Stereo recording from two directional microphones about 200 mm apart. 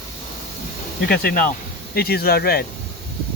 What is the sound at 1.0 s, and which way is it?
Speech, 45° left (ahead or behind).